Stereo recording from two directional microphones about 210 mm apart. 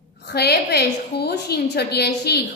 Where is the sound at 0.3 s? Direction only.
50° left (ahead or behind).